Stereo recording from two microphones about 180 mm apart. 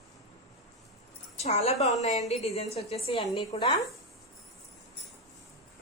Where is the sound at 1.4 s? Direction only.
35° left (ahead or behind).